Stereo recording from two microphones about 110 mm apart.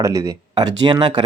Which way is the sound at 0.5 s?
40° right (ahead or behind).